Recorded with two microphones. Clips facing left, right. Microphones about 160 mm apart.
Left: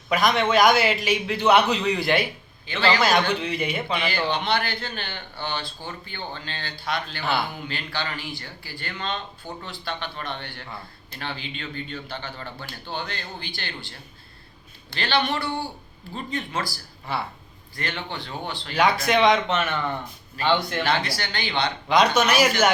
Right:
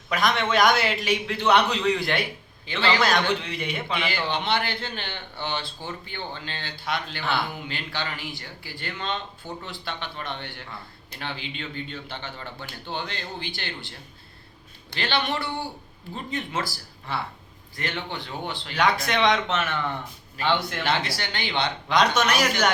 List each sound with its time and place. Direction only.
0.1 s a man's voice: centre (ahead or behind)
2.6 s a man's voice: 25° right (ahead or behind)
3.0 s a man's voice: centre (ahead or behind)
4.0 s a man's voice: 25° right (ahead or behind)
17.1 s a man's voice: 5° left (ahead or behind)
18.1 s a man's voice: 20° right (ahead or behind)
18.8 s a man's voice: 5° left (ahead or behind)
20.8 s a man's voice: 25° right (ahead or behind)
21.8 s a man's voice: centre (ahead or behind)